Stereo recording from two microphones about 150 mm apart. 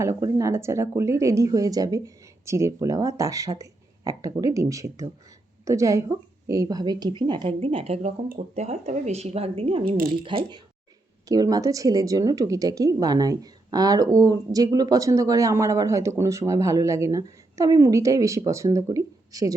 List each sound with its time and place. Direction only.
0.0 s a woman's voice: 20° right (ahead or behind)